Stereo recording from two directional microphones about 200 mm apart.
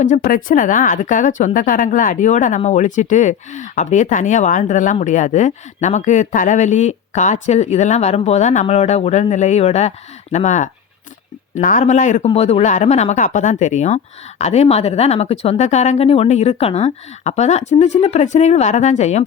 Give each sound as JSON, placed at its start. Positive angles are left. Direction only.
{"t": 0.0, "sound": "speech", "side_deg": 40}